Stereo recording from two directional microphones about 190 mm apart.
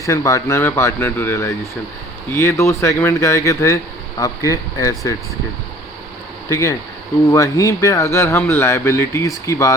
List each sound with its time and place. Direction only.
0.0 s speech: 15° left (ahead or behind)
6.5 s speech: 15° left (ahead or behind)